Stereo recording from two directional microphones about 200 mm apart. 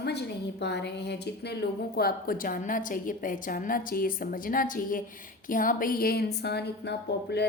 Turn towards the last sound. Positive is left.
turn(degrees=55)  # may be behind; listen again after turning